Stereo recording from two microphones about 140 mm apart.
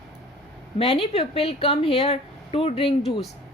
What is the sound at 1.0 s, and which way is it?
A woman's voice, 45° left (ahead or behind).